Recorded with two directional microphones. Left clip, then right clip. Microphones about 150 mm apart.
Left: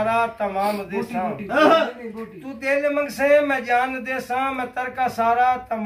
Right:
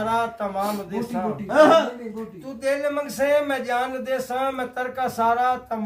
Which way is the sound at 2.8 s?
35° right (ahead or behind).